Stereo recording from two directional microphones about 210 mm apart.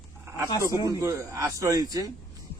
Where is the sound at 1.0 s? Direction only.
15° right (ahead or behind).